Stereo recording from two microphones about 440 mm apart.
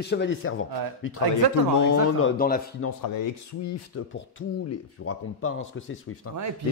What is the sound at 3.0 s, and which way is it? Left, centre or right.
Speech, left.